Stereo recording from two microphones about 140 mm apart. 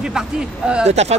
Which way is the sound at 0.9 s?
50° right (ahead or behind).